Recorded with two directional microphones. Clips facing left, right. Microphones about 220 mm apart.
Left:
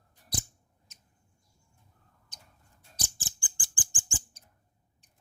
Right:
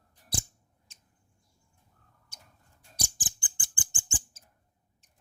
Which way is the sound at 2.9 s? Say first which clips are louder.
Right 2 dB; 15° right (ahead or behind).